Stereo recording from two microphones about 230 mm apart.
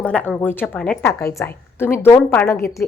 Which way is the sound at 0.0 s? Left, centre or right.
Centre.